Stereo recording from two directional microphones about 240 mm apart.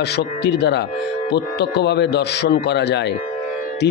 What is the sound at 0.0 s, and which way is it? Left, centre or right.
Speech, left.